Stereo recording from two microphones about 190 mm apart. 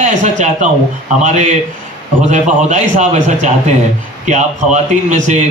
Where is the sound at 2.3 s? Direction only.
40° right (ahead or behind).